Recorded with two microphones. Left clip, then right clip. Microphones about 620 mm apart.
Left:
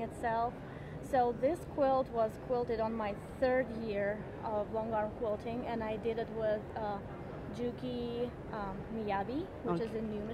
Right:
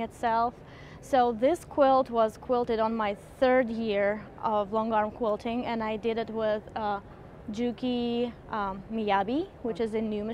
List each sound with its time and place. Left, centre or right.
0.0 s speech: right